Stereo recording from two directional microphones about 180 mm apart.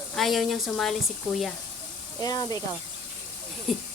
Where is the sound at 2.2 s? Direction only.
20° left (ahead or behind).